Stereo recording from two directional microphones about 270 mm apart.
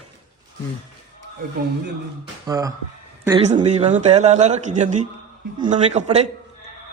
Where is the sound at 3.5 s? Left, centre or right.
Right.